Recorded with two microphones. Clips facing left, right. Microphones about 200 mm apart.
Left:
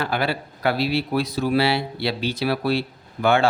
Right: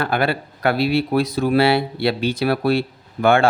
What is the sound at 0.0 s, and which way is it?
Speech, 55° right (ahead or behind).